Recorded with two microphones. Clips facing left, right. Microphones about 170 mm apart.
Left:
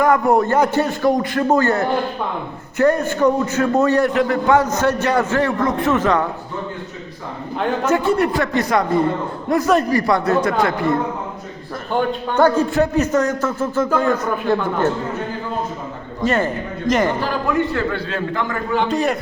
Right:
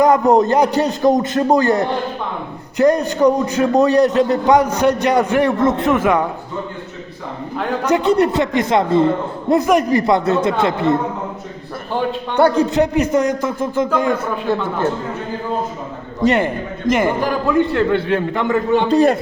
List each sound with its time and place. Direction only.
0.0 s a man's voice: 20° right (ahead or behind)
5.9 s a man's voice: 10° right (ahead or behind)
7.9 s a man's voice: 20° right (ahead or behind)
12.4 s a man's voice: 15° right (ahead or behind)
16.2 s a man's voice: 20° right (ahead or behind)